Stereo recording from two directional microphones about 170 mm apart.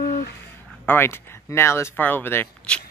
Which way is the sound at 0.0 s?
65° left (ahead or behind).